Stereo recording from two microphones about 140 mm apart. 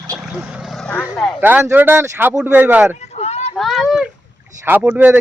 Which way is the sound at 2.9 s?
50° left (ahead or behind).